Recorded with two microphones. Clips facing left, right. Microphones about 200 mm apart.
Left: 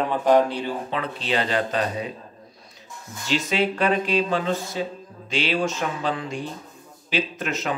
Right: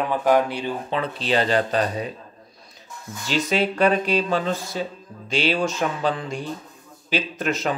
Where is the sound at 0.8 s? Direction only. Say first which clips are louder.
Right 3 dB; 35° right (ahead or behind).